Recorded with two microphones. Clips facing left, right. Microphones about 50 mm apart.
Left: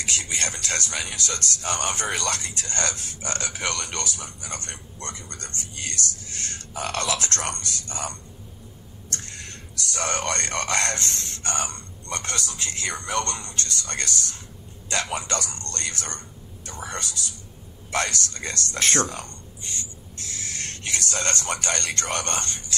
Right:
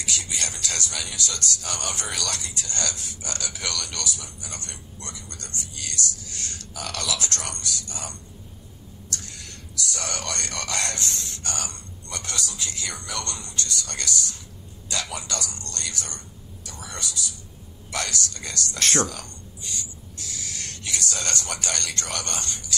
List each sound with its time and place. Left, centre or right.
0.0 s speech: left
18.8 s speech: left